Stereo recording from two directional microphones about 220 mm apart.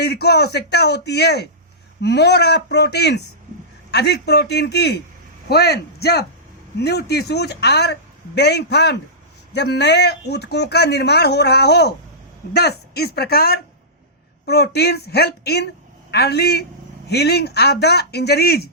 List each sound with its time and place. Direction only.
0.0 s speech: 50° left (ahead or behind)